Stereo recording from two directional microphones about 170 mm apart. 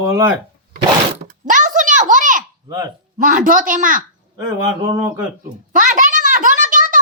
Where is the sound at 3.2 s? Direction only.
50° right (ahead or behind).